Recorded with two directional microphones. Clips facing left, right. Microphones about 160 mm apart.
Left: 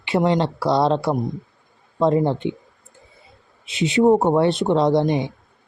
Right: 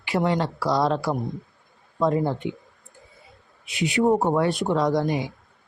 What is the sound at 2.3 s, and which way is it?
Speech, 25° left (ahead or behind).